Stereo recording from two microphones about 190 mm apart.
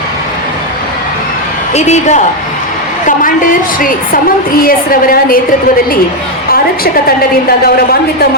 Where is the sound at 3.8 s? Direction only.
45° left (ahead or behind).